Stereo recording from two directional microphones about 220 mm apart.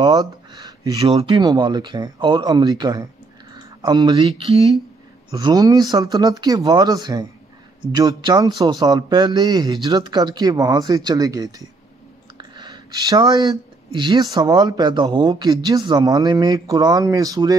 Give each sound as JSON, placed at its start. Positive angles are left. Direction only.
{"t": 0.0, "sound": "speech", "side_deg": -20}
{"t": 12.4, "sound": "a sound", "side_deg": -20}
{"t": 13.9, "sound": "speech", "side_deg": -20}